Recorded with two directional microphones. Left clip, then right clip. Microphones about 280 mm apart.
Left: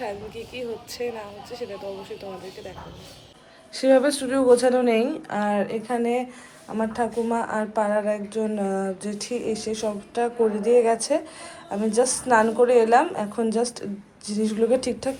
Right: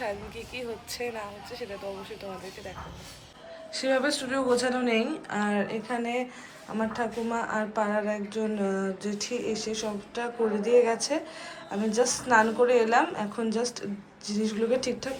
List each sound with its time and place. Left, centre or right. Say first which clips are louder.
0.0 s speech: left 2 dB; centre